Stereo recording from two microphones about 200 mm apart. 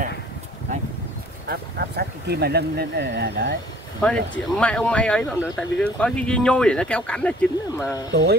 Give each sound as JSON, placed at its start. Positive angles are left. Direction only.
{"t": 1.5, "sound": "speech", "side_deg": -50}
{"t": 4.0, "sound": "speech", "side_deg": 5}
{"t": 8.1, "sound": "speech", "side_deg": -55}